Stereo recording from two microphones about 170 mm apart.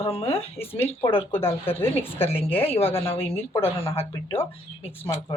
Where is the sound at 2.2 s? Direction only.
35° left (ahead or behind).